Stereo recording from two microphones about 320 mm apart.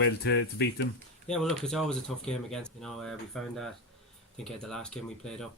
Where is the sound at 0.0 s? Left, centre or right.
Left.